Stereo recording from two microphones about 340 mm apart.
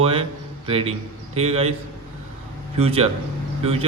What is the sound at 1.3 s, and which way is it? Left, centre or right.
Speech, centre.